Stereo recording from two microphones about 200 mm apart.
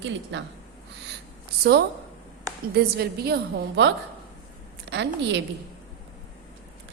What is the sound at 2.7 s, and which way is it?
A woman's voice, 55° right (ahead or behind).